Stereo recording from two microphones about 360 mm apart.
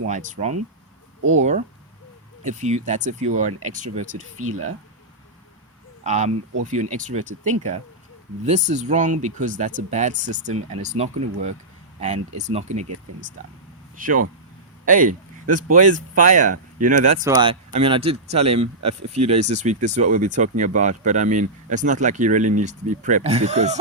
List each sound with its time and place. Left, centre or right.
0.0 s speech: right
4.4 s speech: right
6.0 s speech: centre
13.9 s speech: right
18.6 s speech: right
19.1 s speech: centre